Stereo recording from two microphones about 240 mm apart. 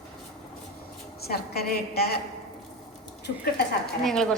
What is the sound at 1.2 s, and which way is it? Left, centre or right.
Speech, left.